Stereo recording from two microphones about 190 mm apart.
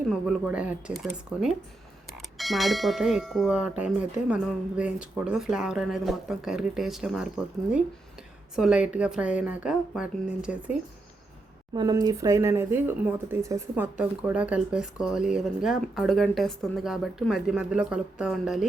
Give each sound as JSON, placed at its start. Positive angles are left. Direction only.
{"t": 0.1, "sound": "speech", "side_deg": -5}
{"t": 8.5, "sound": "speech", "side_deg": -5}
{"t": 11.7, "sound": "speech", "side_deg": -20}